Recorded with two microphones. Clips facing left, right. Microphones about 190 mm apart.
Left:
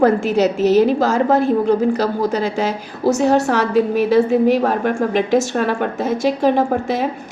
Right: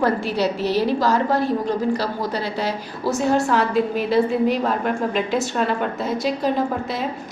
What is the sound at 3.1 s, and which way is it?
Speech, 70° left (ahead or behind).